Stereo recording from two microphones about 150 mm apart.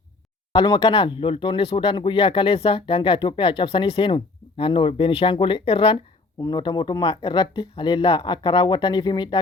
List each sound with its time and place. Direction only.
0.5 s speech: 30° left (ahead or behind)